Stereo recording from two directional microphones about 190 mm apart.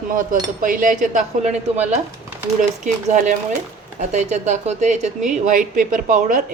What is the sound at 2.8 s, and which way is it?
A woman's voice, 40° right (ahead or behind).